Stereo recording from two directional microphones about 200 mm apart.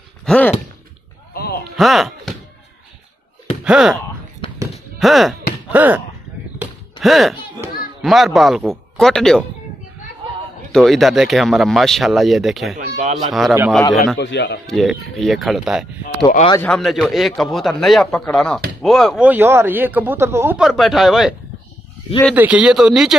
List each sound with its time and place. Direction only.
0.2 s a sound: 5° left (ahead or behind)
1.8 s speech: centre (ahead or behind)
3.6 s speech: centre (ahead or behind)
6.6 s a sound: centre (ahead or behind)
7.6 s children playing: 10° right (ahead or behind)
8.0 s speech: centre (ahead or behind)
10.7 s speech: centre (ahead or behind)
12.7 s speech: 40° right (ahead or behind)
13.2 s speech: centre (ahead or behind)
14.1 s a man's voice: 60° left (ahead or behind)
14.7 s speech: centre (ahead or behind)